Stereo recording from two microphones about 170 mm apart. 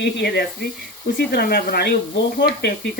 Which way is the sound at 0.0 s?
70° left (ahead or behind).